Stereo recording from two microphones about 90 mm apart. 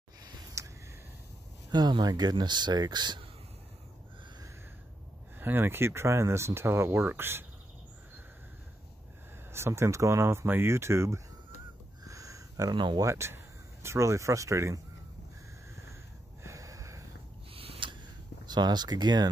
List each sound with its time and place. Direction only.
0.2 s a sound: 50° right (ahead or behind)
1.7 s speech: 55° right (ahead or behind)
5.4 s speech: 25° right (ahead or behind)
9.5 s speech: 30° right (ahead or behind)
12.0 s a sound: 40° right (ahead or behind)
12.7 s speech: 60° right (ahead or behind)
13.0 s speech: 30° right (ahead or behind)
16.4 s snort: 35° right (ahead or behind)
17.5 s a sound: 90° right
18.4 s speech: 50° right (ahead or behind)